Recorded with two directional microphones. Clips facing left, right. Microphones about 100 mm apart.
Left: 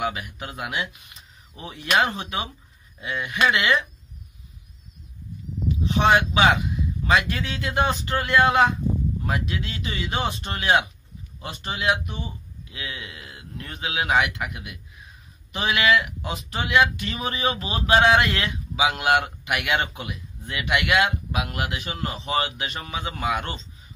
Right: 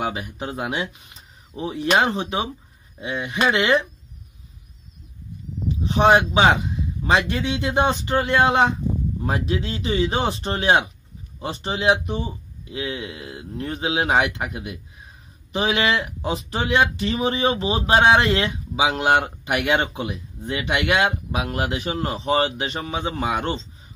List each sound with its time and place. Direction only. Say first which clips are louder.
0.0 s speech: right 2 dB; 30° right (ahead or behind)
5.7 s speech: right 3 dB; 30° right (ahead or behind)